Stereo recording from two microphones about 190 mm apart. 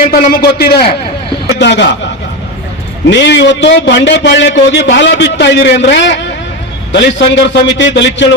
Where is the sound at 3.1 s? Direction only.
70° left (ahead or behind).